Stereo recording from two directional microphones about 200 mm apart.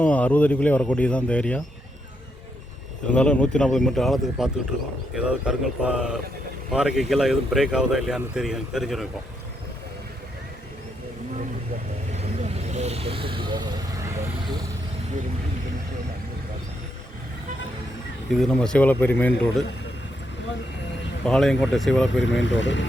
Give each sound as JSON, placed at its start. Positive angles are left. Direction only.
{"t": 0.0, "sound": "speech", "side_deg": 10}
{"t": 3.1, "sound": "speech", "side_deg": 5}
{"t": 12.1, "sound": "vehicle", "side_deg": -35}
{"t": 18.3, "sound": "speech", "side_deg": 0}
{"t": 21.2, "sound": "speech", "side_deg": 5}
{"t": 22.2, "sound": "speech", "side_deg": 65}